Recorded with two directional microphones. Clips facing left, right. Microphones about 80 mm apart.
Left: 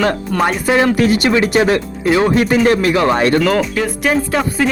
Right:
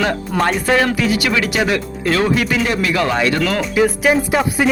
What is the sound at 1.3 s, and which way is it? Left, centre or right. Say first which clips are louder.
Speech: left 4 dB; left.